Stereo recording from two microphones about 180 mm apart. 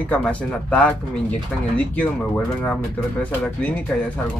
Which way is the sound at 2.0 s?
5° left (ahead or behind).